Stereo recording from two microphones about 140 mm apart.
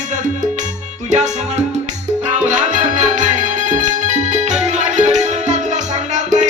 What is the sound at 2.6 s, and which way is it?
Music, 60° right (ahead or behind).